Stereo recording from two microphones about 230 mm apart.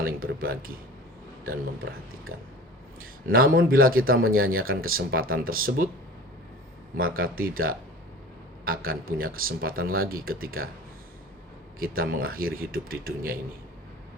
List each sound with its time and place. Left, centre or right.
0.0 s speech: right
3.0 s speech: right
6.9 s speech: right
11.8 s speech: right